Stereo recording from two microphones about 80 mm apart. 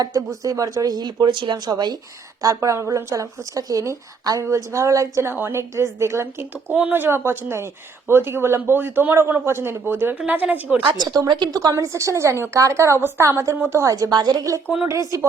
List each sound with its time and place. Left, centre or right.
0.0 s speech: right
2.4 s speech: right
5.3 s a woman's voice: right
10.8 s speech: right
11.7 s a woman's voice: right
14.1 s a woman's voice: right